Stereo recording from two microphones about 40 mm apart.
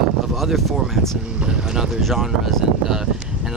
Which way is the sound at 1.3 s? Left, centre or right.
Right.